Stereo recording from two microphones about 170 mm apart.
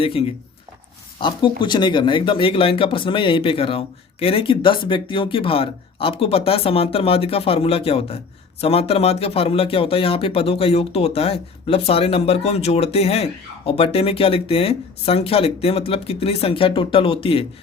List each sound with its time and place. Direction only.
0.0 s speech: 35° left (ahead or behind)